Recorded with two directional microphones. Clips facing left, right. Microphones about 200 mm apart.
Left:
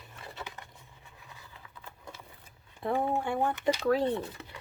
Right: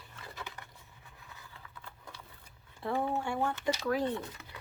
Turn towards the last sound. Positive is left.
turn(degrees=25)  # may be behind; listen again after turning